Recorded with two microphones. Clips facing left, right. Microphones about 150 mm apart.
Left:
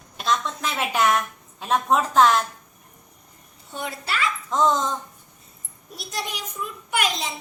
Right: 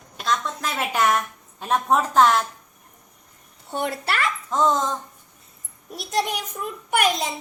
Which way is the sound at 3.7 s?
65° right (ahead or behind).